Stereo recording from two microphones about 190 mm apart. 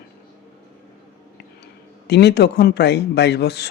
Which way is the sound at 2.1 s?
60° left (ahead or behind).